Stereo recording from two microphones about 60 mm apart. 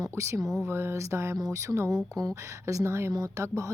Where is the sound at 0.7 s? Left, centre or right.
Right.